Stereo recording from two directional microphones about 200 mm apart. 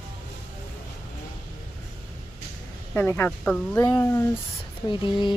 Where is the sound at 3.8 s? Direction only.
15° left (ahead or behind).